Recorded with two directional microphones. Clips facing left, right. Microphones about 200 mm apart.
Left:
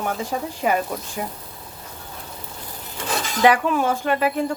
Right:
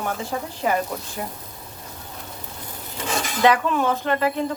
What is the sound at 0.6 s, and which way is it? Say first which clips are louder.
Speech: left 1 dB; 10° left (ahead or behind).